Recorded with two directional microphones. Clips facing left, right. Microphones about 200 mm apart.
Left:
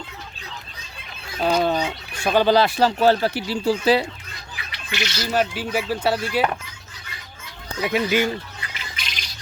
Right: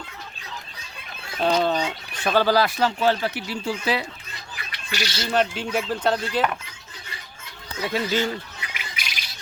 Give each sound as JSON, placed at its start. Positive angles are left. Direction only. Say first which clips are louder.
{"t": 1.4, "sound": "speech", "louder": "left 1 dB", "side_deg": 5}
{"t": 4.9, "sound": "speech", "louder": "left 1 dB", "side_deg": -35}
{"t": 5.3, "sound": "speech", "louder": "even", "side_deg": 5}
{"t": 7.8, "sound": "speech", "louder": "left 3 dB", "side_deg": 15}
{"t": 9.0, "sound": "bird", "louder": "left 1 dB", "side_deg": -10}